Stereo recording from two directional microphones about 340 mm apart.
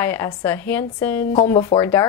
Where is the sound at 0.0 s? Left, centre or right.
Centre.